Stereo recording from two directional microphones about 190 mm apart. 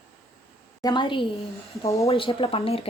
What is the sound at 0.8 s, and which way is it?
A woman's voice, 20° left (ahead or behind).